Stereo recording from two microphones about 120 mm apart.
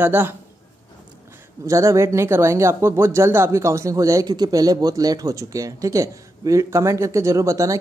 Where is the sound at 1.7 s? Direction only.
25° right (ahead or behind).